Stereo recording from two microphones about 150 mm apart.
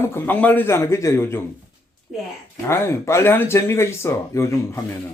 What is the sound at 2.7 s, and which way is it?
Speech, 15° left (ahead or behind).